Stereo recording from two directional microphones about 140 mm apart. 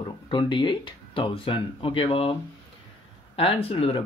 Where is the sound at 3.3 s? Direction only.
40° left (ahead or behind).